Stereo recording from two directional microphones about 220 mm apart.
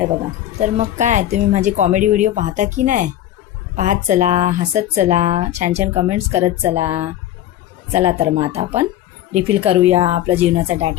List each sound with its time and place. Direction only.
0.6 s speech: 35° right (ahead or behind)
6.8 s speech: 10° right (ahead or behind)
7.9 s a woman's voice: 25° right (ahead or behind)